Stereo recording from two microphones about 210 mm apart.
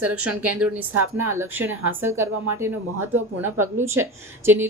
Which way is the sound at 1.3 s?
10° right (ahead or behind).